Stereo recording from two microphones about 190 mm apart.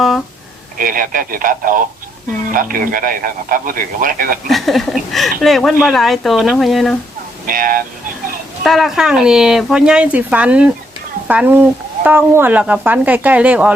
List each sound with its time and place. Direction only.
0.8 s a man's voice: 45° right (ahead or behind)
4.4 s speech: centre (ahead or behind)
7.4 s a man's voice: 45° right (ahead or behind)
8.6 s speech: centre (ahead or behind)